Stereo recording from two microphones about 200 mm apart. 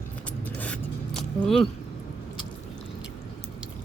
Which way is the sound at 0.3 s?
5° left (ahead or behind).